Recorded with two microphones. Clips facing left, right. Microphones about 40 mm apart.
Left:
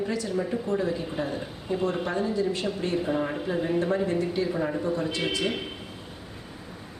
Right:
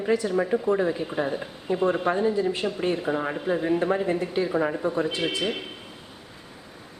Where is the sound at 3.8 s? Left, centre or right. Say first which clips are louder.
Right 1 dB; right.